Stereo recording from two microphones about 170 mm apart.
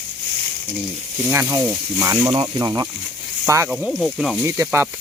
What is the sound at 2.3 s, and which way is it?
Speech, 35° right (ahead or behind).